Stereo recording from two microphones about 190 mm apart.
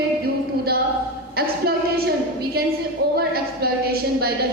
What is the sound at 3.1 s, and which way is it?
A woman's voice, 55° right (ahead or behind).